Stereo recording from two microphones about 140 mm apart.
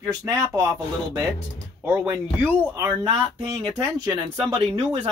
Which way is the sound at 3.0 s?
35° right (ahead or behind).